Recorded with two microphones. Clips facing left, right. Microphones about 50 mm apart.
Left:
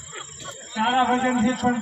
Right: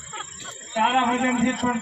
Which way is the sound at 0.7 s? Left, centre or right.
Centre.